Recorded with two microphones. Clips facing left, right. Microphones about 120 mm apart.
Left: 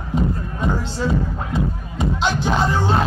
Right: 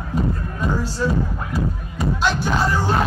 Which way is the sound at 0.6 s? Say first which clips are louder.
Even; 20° left (ahead or behind).